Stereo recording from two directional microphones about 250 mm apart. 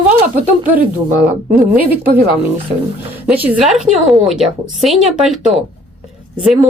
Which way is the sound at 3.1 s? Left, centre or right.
Centre.